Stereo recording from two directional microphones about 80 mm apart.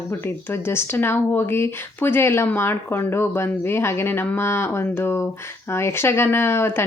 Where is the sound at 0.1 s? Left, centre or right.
Left.